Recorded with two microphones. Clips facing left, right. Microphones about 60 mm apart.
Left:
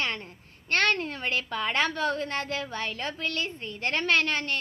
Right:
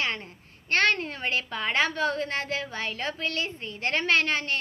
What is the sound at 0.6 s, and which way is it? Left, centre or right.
A woman's voice, right.